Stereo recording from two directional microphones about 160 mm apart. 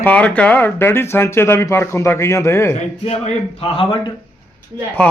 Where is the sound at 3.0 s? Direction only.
45° left (ahead or behind).